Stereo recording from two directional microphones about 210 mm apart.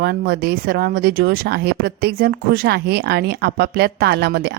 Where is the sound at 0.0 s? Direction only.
50° right (ahead or behind).